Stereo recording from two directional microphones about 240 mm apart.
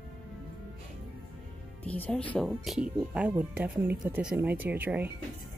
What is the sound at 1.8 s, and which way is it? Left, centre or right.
Speech, centre.